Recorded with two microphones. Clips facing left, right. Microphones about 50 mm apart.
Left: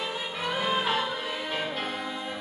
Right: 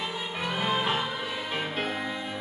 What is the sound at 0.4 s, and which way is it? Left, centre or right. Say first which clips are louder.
Music: even; centre.